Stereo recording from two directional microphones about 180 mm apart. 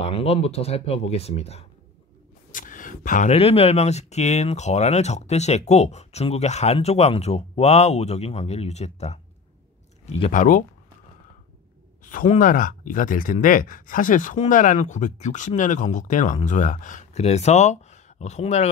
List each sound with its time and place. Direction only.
0.0 s speech: 35° left (ahead or behind)
2.5 s speech: 45° left (ahead or behind)
10.3 s speech: 45° left (ahead or behind)
12.0 s speech: 45° left (ahead or behind)